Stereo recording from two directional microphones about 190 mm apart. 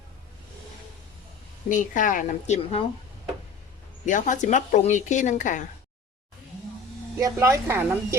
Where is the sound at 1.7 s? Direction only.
45° left (ahead or behind).